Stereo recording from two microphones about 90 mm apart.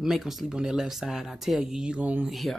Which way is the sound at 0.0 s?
5° right (ahead or behind).